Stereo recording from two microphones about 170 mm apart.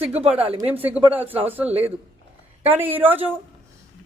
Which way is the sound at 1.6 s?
35° right (ahead or behind).